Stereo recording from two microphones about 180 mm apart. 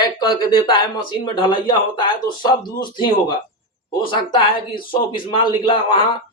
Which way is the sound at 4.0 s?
25° left (ahead or behind).